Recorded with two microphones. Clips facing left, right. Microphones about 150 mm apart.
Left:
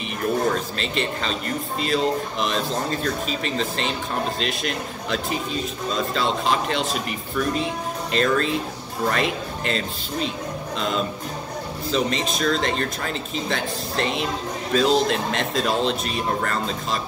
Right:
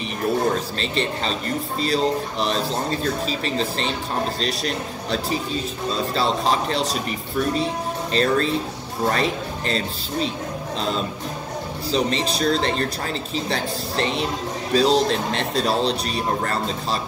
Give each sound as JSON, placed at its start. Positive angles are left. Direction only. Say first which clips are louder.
{"t": 0.5, "sound": "a man's voice", "louder": "right 1 dB", "side_deg": -35}
{"t": 11.9, "sound": "speech", "louder": "right 1 dB", "side_deg": -35}